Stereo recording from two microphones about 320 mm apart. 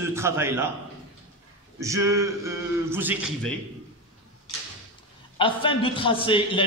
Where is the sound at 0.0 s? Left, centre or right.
Centre.